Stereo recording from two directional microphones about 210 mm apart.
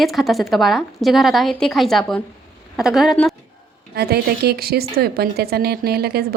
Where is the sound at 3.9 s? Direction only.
50° right (ahead or behind).